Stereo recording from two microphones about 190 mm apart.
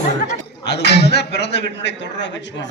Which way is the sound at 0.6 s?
60° left (ahead or behind).